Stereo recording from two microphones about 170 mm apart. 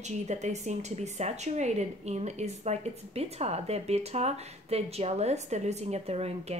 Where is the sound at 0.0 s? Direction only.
40° right (ahead or behind).